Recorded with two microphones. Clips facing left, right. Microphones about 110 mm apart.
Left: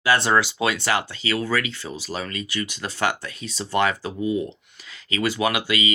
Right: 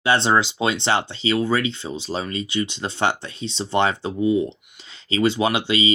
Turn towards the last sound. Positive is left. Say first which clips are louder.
# right 2 dB
turn(degrees=-25)  # may be behind; listen again after turning